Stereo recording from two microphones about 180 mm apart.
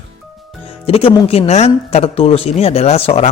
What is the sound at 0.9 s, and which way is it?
Speech, 35° left (ahead or behind).